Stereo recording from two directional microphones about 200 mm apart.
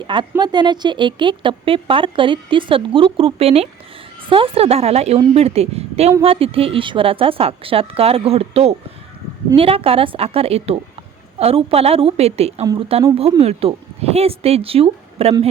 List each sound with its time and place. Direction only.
0.1 s a woman's voice: 20° right (ahead or behind)